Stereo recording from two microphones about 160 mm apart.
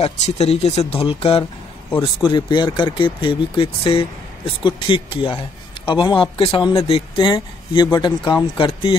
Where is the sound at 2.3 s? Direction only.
30° left (ahead or behind).